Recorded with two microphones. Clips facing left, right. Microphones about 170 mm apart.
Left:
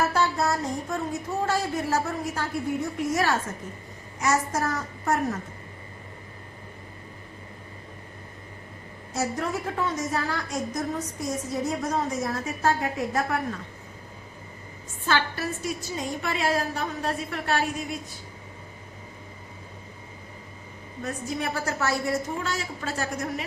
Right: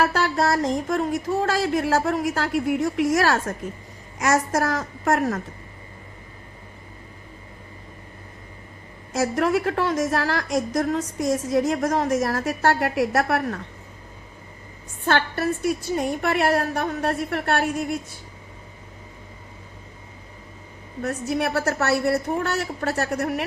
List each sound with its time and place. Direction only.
0.0 s a woman's voice: 90° right
9.1 s a woman's voice: 90° right; by 13.6 s 70° right (ahead or behind)
15.0 s a woman's voice: 55° right (ahead or behind)
21.0 s a woman's voice: 70° right (ahead or behind)